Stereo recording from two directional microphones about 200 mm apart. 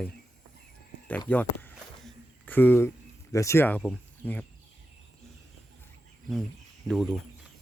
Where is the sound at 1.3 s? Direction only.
5° left (ahead or behind).